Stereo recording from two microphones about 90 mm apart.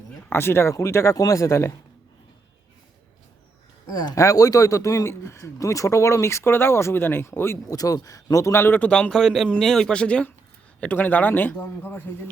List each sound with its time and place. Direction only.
0.3 s a man's voice: 25° left (ahead or behind)
3.8 s a man's voice: 45° left (ahead or behind); by 7.6 s 30° left (ahead or behind)
7.7 s a man's voice: 40° left (ahead or behind); by 8.9 s 25° left (ahead or behind)
8.9 s a man's voice: 10° left (ahead or behind); by 12.3 s 25° left (ahead or behind)